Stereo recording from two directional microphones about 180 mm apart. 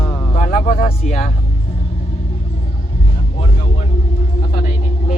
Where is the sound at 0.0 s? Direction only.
15° left (ahead or behind).